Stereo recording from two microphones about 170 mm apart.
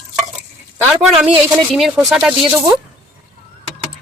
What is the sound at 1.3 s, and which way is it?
Speech, 30° right (ahead or behind).